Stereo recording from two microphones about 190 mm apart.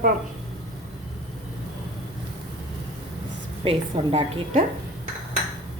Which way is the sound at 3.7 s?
30° right (ahead or behind).